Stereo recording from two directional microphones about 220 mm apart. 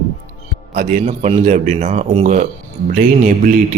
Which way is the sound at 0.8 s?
30° right (ahead or behind).